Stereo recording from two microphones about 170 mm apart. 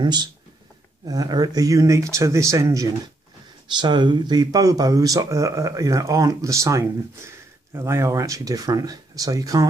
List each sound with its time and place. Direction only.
0.0 s speech: 25° right (ahead or behind)